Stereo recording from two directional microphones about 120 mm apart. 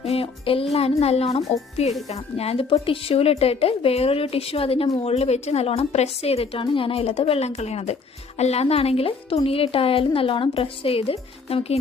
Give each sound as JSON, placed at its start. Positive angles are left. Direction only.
{"t": 0.0, "sound": "a woman's voice", "side_deg": 55}